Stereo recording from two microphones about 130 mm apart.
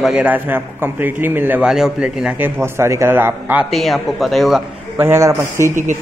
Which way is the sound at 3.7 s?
Centre (ahead or behind).